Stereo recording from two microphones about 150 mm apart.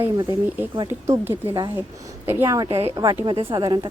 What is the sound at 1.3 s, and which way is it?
Speech, 35° right (ahead or behind).